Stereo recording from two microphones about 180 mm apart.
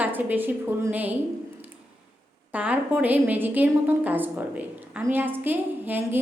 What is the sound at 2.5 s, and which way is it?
A woman's voice, 10° right (ahead or behind).